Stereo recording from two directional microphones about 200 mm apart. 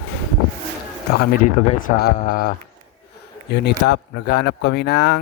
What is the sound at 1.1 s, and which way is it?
Speech, 50° left (ahead or behind).